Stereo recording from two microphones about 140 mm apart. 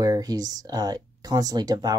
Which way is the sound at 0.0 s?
25° right (ahead or behind).